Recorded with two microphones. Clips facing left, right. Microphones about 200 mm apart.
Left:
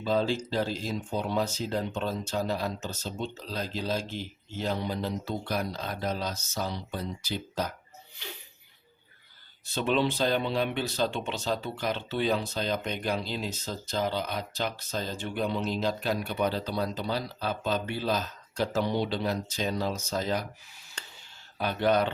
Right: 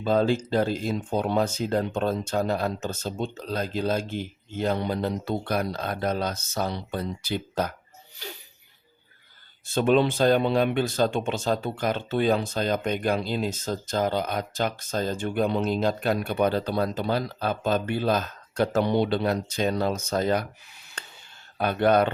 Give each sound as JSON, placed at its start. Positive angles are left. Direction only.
{"t": 0.0, "sound": "speech", "side_deg": -55}
{"t": 9.6, "sound": "speech", "side_deg": -50}
{"t": 21.6, "sound": "speech", "side_deg": -55}